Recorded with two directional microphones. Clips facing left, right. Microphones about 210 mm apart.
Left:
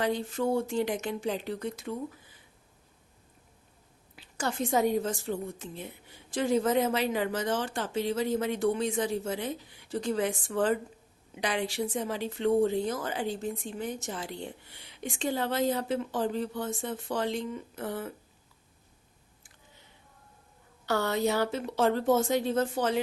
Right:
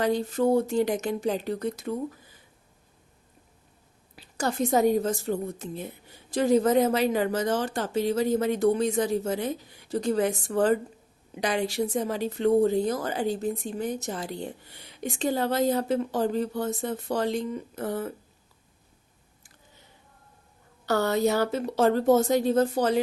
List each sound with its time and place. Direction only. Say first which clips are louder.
0.0 s a woman's voice: right 5 dB; 40° right (ahead or behind)
4.1 s a woman's voice: right 4 dB; 40° right (ahead or behind)
20.8 s a woman's voice: right 4 dB; 40° right (ahead or behind)